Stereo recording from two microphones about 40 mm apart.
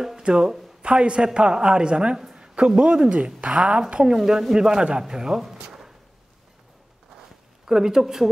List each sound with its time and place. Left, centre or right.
0.2 s a woman's voice: centre
7.6 s speech: centre